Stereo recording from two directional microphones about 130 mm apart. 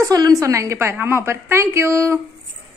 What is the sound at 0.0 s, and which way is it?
A woman's voice, 30° right (ahead or behind).